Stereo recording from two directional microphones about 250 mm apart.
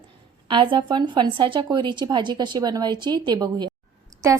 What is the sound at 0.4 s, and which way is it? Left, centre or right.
A woman's voice, centre.